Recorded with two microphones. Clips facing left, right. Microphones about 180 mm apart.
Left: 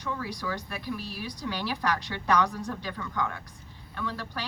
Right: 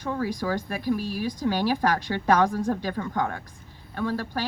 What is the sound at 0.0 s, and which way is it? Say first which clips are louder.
A woman's voice: right 6 dB; 50° right (ahead or behind).